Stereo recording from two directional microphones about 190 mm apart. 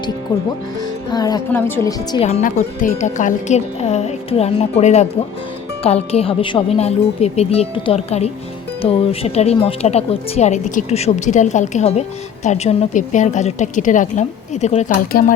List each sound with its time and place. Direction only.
1.1 s speech: 20° left (ahead or behind)
2.2 s speech: 35° left (ahead or behind)